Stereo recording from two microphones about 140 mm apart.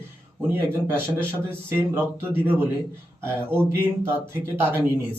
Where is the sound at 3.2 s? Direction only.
15° right (ahead or behind).